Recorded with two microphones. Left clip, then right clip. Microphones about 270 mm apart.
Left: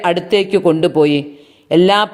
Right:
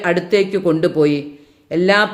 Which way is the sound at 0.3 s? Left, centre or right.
Centre.